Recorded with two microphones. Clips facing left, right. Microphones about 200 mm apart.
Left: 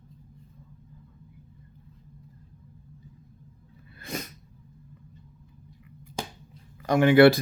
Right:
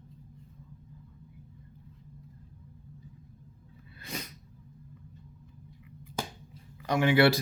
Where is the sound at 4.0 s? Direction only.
50° left (ahead or behind).